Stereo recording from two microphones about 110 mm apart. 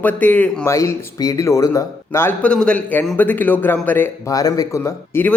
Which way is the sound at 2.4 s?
10° left (ahead or behind).